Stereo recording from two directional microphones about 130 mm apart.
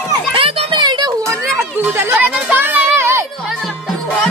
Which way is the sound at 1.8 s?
15° right (ahead or behind).